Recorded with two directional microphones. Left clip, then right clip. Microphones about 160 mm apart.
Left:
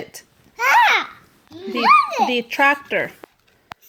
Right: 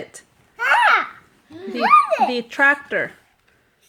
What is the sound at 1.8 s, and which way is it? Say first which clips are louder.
Speech: even; 20° right (ahead or behind).